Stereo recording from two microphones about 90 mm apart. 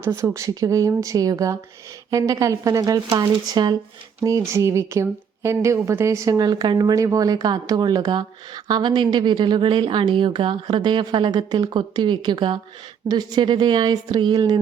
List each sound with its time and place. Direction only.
0.0 s speech: 30° right (ahead or behind); by 3.8 s 50° right (ahead or behind)
4.2 s speech: 35° right (ahead or behind); by 6.9 s 50° right (ahead or behind)
6.9 s speech: 40° right (ahead or behind); by 11.3 s 60° right (ahead or behind)
11.3 s speech: 50° right (ahead or behind)
13.1 s speech: 50° right (ahead or behind)